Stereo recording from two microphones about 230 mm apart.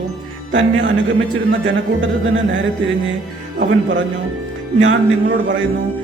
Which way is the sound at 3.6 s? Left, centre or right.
Right.